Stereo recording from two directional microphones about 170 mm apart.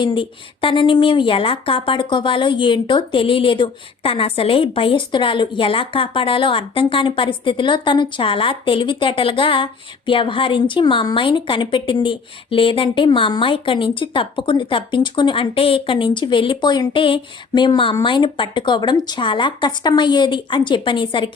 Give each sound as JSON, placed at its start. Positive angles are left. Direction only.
{"t": 0.0, "sound": "a woman's voice", "side_deg": 30}